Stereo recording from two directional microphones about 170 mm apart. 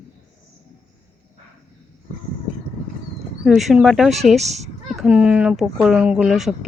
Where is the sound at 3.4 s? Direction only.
Centre (ahead or behind).